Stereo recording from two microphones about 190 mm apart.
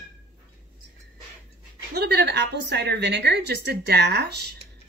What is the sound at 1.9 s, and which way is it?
A woman's voice, 60° right (ahead or behind).